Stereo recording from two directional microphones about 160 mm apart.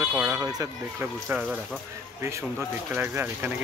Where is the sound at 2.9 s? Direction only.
15° right (ahead or behind).